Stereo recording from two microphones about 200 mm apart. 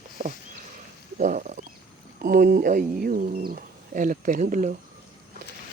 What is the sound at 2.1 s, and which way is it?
Speech, 50° right (ahead or behind).